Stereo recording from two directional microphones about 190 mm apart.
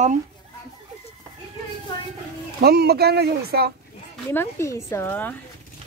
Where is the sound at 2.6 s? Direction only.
55° right (ahead or behind).